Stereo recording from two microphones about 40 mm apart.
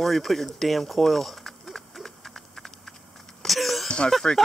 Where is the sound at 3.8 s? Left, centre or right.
Left.